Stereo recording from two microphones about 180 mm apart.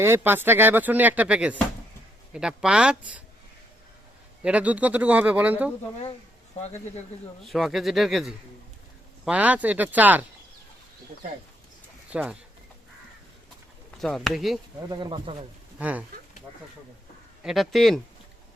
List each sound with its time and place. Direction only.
0.0 s speech: 15° right (ahead or behind)
4.4 s speech: 10° right (ahead or behind)
6.6 s speech: 40° left (ahead or behind)
7.4 s speech: centre (ahead or behind)
12.1 s speech: 5° right (ahead or behind)
14.0 s speech: 5° left (ahead or behind)
14.8 s speech: 25° right (ahead or behind)
15.8 s speech: 10° right (ahead or behind)
17.4 s speech: centre (ahead or behind)